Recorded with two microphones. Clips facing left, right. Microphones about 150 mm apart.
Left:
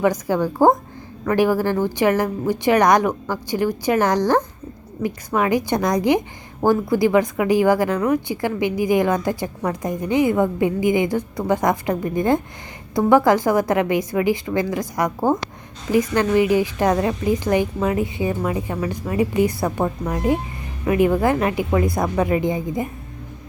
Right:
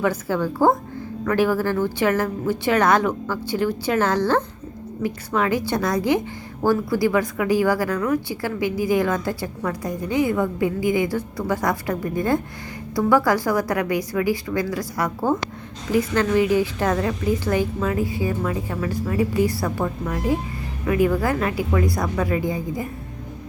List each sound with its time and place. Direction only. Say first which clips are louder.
0.0 s a woman's voice: left 3 dB; 15° left (ahead or behind)